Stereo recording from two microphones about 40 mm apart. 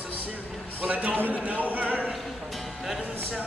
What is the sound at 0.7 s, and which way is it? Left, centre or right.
Speech, right.